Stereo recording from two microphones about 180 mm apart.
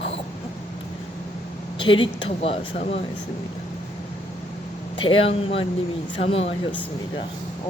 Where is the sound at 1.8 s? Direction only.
30° left (ahead or behind).